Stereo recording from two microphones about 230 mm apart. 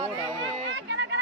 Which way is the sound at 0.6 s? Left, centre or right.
Right.